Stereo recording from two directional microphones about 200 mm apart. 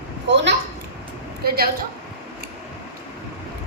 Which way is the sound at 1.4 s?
50° right (ahead or behind).